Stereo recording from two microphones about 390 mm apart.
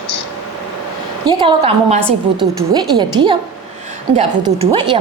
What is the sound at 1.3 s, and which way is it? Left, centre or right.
A woman's voice, centre.